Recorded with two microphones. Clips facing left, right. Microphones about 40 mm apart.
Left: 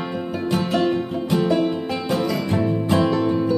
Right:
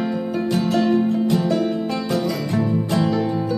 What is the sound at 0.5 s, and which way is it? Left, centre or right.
Music, left.